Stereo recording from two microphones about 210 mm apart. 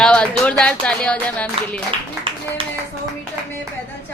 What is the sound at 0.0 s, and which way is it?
Speech, 5° left (ahead or behind).